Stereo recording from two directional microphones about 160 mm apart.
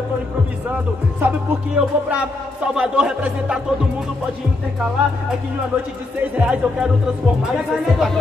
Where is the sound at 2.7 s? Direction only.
5° right (ahead or behind).